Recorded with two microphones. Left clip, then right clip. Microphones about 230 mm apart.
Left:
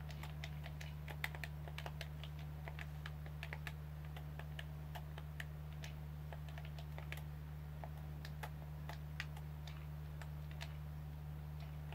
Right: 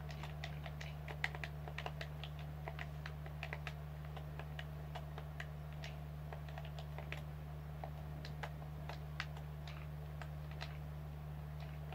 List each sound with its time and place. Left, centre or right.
1.2 s computer keyboard: centre